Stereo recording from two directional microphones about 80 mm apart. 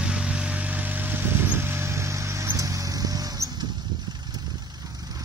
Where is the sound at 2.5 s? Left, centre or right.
Right.